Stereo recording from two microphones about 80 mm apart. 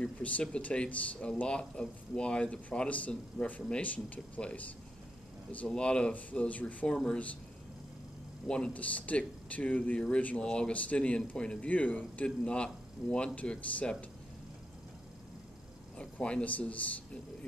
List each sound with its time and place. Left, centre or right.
0.0 s speech: centre
8.5 s speech: centre
16.0 s speech: centre